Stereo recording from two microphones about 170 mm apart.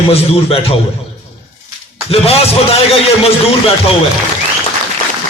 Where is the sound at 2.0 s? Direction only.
35° left (ahead or behind).